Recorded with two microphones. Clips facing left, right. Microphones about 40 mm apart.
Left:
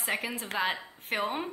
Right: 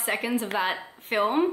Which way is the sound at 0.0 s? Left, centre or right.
Centre.